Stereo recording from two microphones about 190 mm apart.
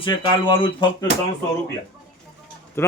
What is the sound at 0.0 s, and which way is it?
Speech, 25° left (ahead or behind).